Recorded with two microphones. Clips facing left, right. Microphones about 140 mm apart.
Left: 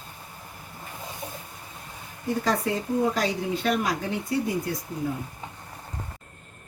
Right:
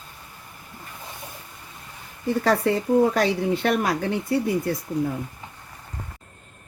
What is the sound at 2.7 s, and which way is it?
Speech, 70° right (ahead or behind).